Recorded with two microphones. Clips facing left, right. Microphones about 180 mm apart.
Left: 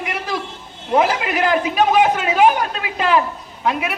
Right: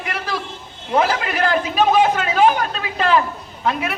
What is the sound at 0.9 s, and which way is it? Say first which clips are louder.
A man's voice: left 2 dB; 20° left (ahead or behind).